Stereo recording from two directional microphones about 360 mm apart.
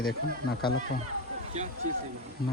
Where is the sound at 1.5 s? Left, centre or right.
Centre.